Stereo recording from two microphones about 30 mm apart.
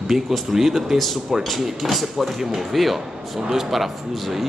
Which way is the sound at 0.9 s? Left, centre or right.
Centre.